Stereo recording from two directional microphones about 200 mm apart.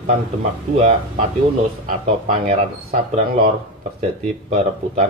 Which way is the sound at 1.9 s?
40° right (ahead or behind).